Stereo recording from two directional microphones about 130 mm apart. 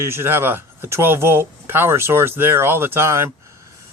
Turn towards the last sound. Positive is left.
turn(degrees=-20)  # may be behind; listen again after turning